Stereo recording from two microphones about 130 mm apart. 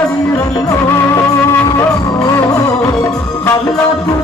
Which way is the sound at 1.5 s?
25° left (ahead or behind).